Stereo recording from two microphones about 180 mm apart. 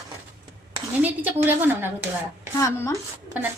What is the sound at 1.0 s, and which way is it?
Speech, 10° right (ahead or behind).